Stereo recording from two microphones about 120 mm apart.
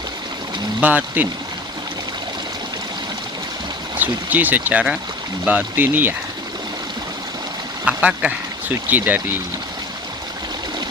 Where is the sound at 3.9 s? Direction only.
15° right (ahead or behind).